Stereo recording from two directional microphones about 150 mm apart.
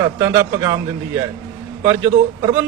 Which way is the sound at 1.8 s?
20° right (ahead or behind).